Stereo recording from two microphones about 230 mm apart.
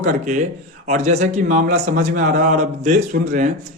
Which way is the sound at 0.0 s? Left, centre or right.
Right.